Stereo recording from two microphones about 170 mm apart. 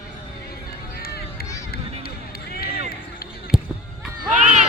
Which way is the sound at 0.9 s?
65° left (ahead or behind).